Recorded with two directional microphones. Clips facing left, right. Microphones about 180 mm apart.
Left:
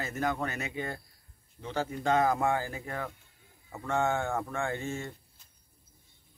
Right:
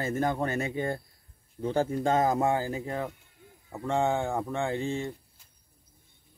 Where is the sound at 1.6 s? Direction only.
40° right (ahead or behind); by 4.8 s 15° right (ahead or behind).